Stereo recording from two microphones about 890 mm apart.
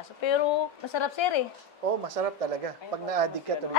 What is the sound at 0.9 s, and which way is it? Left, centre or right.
Speech, left.